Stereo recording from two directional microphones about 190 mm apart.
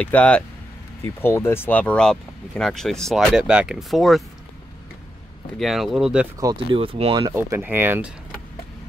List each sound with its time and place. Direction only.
0.0 s speech: 5° left (ahead or behind)
5.6 s speech: centre (ahead or behind)
6.4 s speech: 25° right (ahead or behind)
7.3 s speech: 10° right (ahead or behind)